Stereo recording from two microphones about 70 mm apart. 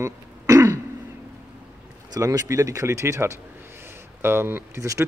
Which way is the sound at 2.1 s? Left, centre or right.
Right.